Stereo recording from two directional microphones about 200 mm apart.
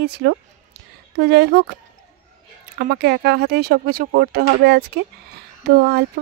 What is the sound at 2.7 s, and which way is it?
Speech, 50° right (ahead or behind).